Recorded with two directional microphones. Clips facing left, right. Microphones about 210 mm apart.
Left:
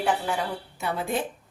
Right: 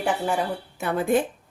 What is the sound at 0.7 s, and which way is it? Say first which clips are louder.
Speech: right 7 dB; 50° right (ahead or behind).